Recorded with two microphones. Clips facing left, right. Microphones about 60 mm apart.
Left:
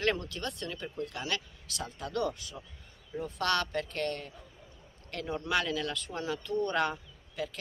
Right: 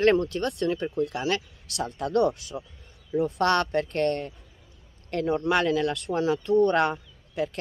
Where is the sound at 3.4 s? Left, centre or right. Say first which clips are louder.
Right 5 dB; right.